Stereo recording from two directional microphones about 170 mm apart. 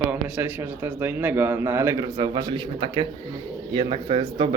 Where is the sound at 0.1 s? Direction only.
10° right (ahead or behind).